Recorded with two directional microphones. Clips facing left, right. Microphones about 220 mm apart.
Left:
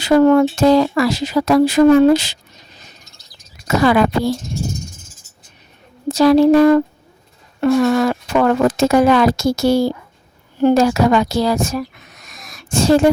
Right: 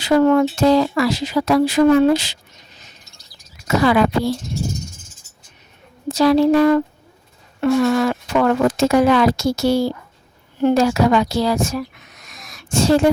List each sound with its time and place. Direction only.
0.0 s speech: 45° left (ahead or behind)
3.8 s speech: 45° left (ahead or behind)
6.1 s speech: 45° left (ahead or behind)
12.3 s a sound: 45° left (ahead or behind)